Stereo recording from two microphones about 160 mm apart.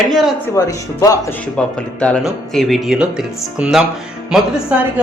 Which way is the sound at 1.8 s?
5° left (ahead or behind).